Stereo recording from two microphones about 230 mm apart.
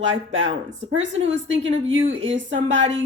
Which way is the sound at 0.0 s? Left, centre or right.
Right.